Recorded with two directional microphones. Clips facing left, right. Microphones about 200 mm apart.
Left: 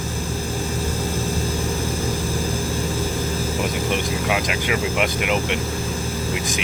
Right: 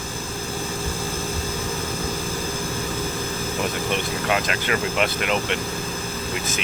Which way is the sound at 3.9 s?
10° left (ahead or behind).